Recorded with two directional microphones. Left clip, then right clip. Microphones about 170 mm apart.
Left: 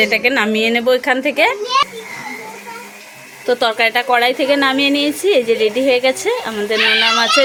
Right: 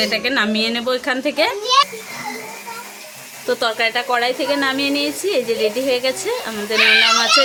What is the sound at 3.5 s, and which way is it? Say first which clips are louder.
A woman's voice: left 4 dB; 25° left (ahead or behind).